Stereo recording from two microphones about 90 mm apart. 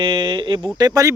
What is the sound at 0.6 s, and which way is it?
Speech, 50° right (ahead or behind).